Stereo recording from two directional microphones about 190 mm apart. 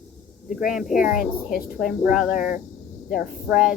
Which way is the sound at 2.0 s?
Centre (ahead or behind).